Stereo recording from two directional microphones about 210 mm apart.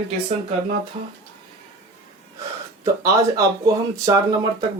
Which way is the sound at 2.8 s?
15° right (ahead or behind).